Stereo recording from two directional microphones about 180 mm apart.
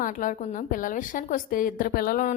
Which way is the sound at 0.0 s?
50° left (ahead or behind).